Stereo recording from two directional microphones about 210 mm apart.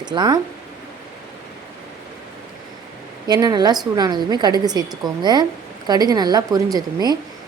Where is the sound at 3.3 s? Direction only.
20° right (ahead or behind).